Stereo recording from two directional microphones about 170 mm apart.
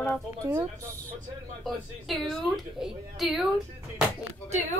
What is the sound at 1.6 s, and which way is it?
Speech, centre (ahead or behind).